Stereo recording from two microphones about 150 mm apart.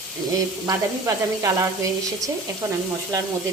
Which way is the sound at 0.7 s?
20° right (ahead or behind).